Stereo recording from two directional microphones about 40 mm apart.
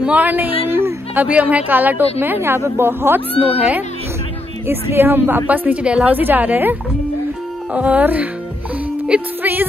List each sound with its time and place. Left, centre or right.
0.1 s a woman's voice: right
0.7 s a sound: right
1.1 s a woman's voice: right
2.1 s speech: right
3.5 s speech: right
4.6 s a woman's voice: right
5.8 s speech: right
6.1 s a woman's voice: right
9.4 s speech: right